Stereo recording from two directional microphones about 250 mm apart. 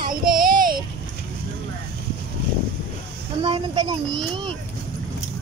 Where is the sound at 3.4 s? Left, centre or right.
Centre.